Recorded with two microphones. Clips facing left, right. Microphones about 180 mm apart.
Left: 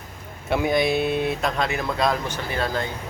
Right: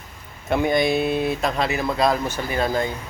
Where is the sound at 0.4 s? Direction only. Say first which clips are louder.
Right 1 dB; 5° left (ahead or behind).